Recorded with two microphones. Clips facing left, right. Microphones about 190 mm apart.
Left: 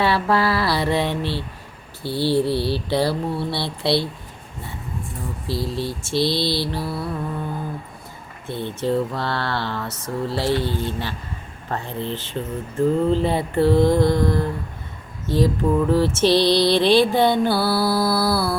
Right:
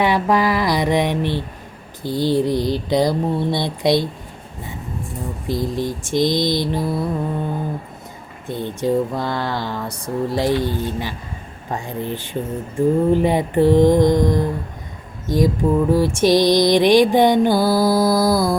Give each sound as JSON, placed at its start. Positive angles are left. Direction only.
{"t": 0.0, "sound": "lullaby", "side_deg": -15}
{"t": 5.5, "sound": "lullaby", "side_deg": -15}
{"t": 8.4, "sound": "lullaby", "side_deg": -15}